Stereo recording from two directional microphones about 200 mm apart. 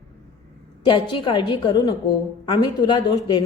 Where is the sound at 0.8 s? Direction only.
25° left (ahead or behind).